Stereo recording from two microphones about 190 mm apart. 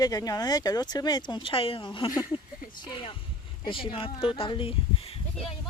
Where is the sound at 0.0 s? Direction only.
20° left (ahead or behind).